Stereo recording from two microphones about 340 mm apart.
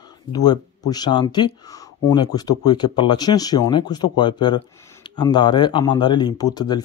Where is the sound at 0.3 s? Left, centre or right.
Centre.